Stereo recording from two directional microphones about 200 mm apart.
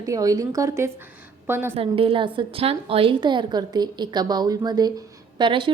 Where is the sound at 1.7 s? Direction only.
30° right (ahead or behind).